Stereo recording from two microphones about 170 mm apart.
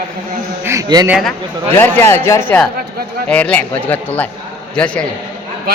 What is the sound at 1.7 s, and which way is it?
Speech, 15° left (ahead or behind).